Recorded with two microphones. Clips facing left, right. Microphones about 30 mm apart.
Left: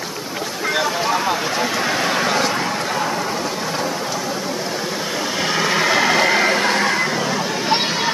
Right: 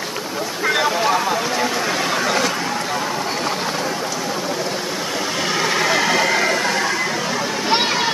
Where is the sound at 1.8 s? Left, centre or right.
Centre.